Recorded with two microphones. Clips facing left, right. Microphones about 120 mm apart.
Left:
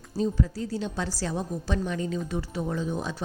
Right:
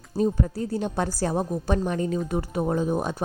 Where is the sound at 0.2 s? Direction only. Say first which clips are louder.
Right 3 dB; 50° right (ahead or behind).